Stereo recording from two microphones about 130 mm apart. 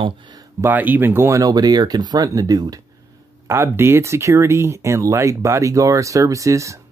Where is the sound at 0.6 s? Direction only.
15° right (ahead or behind).